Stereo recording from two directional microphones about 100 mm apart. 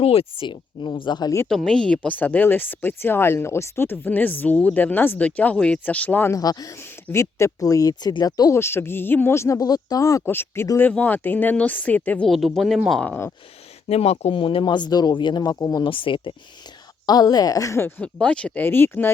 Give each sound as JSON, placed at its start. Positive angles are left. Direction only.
{"t": 0.0, "sound": "speech", "side_deg": 75}
{"t": 1.5, "sound": "speech", "side_deg": 5}
{"t": 6.3, "sound": "speech", "side_deg": 40}
{"t": 6.7, "sound": "speech", "side_deg": 25}
{"t": 8.5, "sound": "speech", "side_deg": 25}
{"t": 12.3, "sound": "speech", "side_deg": 0}
{"t": 13.8, "sound": "speech", "side_deg": 90}
{"t": 15.8, "sound": "speech", "side_deg": 60}
{"t": 17.1, "sound": "speech", "side_deg": 40}
{"t": 18.0, "sound": "speech", "side_deg": 10}